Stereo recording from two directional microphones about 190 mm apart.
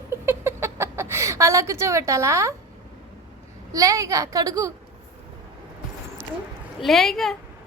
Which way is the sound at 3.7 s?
15° right (ahead or behind).